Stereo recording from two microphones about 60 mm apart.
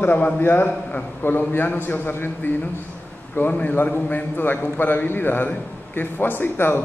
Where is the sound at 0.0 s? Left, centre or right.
Left.